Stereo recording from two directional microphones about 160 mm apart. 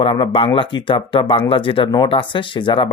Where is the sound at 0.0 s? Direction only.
35° left (ahead or behind).